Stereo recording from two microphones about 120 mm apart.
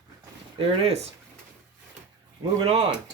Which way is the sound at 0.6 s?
55° right (ahead or behind).